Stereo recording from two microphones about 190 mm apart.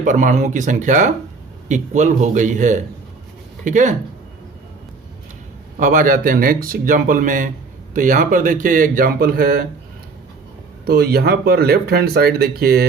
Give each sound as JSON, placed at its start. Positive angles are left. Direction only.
{"t": 0.0, "sound": "a man's voice", "side_deg": -40}
{"t": 5.8, "sound": "speech", "side_deg": -45}
{"t": 10.8, "sound": "speech", "side_deg": -55}